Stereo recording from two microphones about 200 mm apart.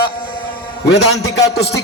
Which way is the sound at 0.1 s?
45° left (ahead or behind).